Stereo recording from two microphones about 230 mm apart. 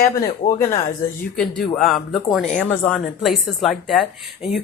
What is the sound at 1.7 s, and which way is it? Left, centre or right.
A woman's voice, centre.